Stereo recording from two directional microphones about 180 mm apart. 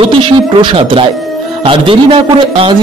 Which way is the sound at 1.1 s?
Centre (ahead or behind).